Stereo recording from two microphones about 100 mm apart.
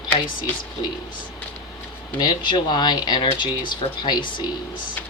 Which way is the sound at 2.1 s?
50° left (ahead or behind).